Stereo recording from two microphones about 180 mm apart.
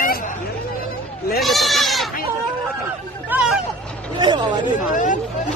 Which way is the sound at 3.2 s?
5° right (ahead or behind).